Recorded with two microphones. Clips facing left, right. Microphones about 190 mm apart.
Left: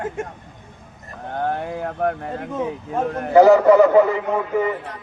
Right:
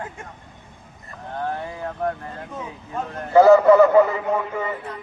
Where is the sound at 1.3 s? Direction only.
60° left (ahead or behind).